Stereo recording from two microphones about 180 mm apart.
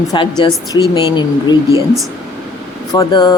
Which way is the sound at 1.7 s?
20° right (ahead or behind).